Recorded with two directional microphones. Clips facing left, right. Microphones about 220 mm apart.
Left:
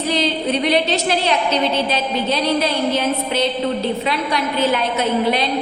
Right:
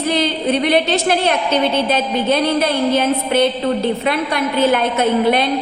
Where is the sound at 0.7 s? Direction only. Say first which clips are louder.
Right 2 dB; 55° right (ahead or behind).